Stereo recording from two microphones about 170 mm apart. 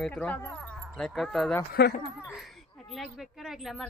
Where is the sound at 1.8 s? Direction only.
75° left (ahead or behind).